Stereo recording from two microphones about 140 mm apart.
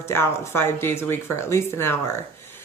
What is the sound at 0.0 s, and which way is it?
Speech, 20° left (ahead or behind).